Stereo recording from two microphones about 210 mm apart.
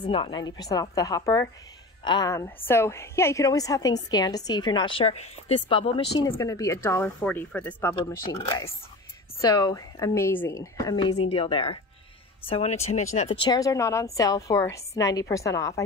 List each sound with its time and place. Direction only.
0.0 s a woman's voice: 25° left (ahead or behind)
6.1 s speech: 15° left (ahead or behind)
8.3 s a woman's voice: 20° left (ahead or behind)